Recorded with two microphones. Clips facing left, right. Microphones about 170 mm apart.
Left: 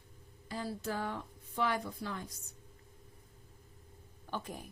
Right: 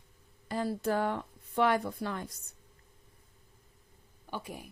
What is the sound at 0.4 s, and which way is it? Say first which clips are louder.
A woman's voice: right 7 dB; 60° right (ahead or behind).